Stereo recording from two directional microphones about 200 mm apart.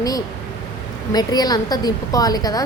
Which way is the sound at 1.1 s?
20° left (ahead or behind).